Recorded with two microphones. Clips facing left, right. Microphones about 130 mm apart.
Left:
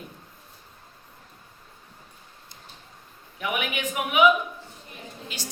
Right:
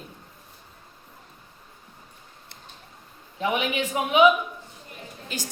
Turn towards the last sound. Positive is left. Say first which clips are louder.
# right 3 dB
turn(degrees=-45)  # may be behind; listen again after turning